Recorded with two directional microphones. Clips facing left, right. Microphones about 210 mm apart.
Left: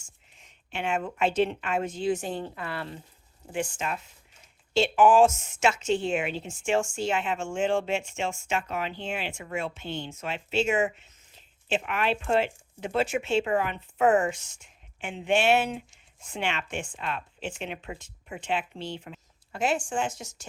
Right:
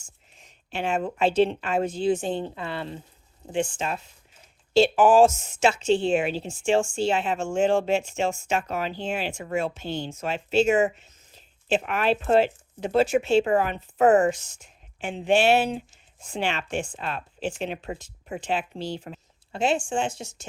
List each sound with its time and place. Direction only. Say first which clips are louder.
0.3 s a woman's voice: right 4 dB; 35° right (ahead or behind)
19.5 s speech: right 3 dB; 25° right (ahead or behind)